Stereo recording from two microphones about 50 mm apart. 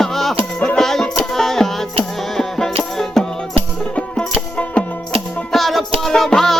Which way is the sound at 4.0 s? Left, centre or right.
Centre.